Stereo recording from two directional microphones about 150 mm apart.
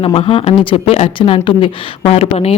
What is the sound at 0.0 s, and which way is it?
Speech, 40° left (ahead or behind).